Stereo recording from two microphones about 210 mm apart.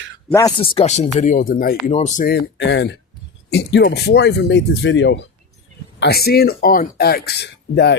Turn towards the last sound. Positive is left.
turn(degrees=55)  # may be behind; listen again after turning